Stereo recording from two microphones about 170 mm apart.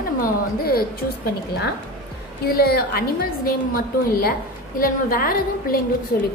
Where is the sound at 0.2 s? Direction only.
60° left (ahead or behind).